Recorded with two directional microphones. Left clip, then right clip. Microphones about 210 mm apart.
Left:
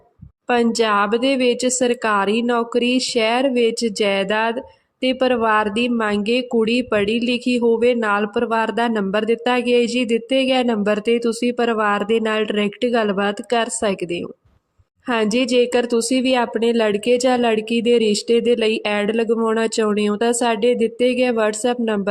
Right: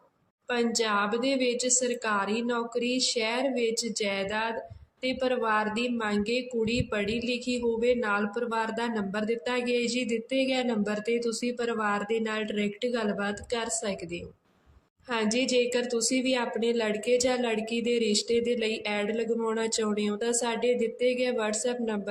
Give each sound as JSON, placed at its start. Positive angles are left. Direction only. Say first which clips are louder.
{"t": 0.4, "sound": "speech", "louder": "left 10 dB", "side_deg": 45}